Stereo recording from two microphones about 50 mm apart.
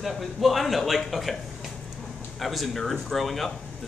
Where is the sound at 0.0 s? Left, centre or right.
Centre.